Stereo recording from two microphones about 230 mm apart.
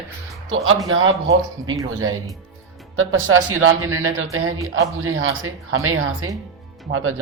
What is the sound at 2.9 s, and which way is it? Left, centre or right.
Speech, right.